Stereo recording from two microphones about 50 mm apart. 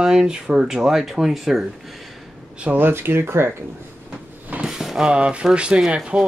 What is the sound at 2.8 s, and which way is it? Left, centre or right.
Speech, right.